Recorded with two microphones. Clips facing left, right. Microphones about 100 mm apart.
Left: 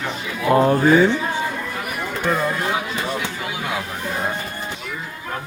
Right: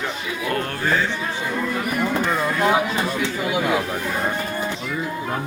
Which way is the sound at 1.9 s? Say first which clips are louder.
Left 1 dB; centre (ahead or behind).